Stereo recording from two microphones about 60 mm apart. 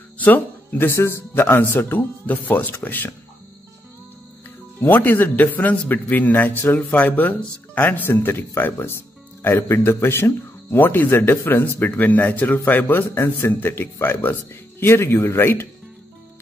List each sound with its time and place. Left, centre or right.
0.2 s speech: left
4.7 s speech: left
8.7 s music: left
9.6 s a man's voice: left